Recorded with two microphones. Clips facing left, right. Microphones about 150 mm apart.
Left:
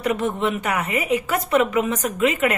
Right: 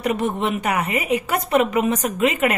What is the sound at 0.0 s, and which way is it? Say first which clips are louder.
Speech: even; 20° right (ahead or behind).